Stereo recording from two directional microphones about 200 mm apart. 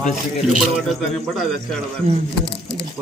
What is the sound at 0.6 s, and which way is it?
Speech, centre (ahead or behind).